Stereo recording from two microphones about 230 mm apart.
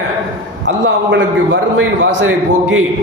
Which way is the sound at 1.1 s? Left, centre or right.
Right.